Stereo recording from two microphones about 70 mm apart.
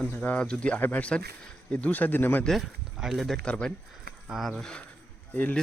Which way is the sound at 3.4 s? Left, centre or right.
Centre.